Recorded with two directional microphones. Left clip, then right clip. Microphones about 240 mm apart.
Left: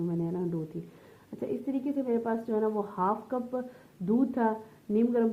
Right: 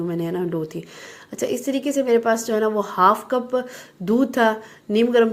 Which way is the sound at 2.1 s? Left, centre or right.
Right.